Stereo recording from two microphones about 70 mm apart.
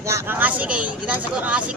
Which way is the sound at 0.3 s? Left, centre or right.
Right.